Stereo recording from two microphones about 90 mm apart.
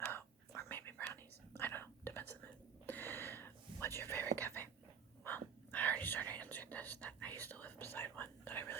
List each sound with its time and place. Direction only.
0.0 s whispering: 25° left (ahead or behind)